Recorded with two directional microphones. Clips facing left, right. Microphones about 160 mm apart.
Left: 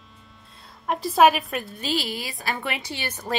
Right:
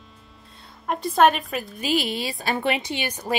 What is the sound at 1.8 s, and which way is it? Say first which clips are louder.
Speech: right 6 dB; 20° right (ahead or behind).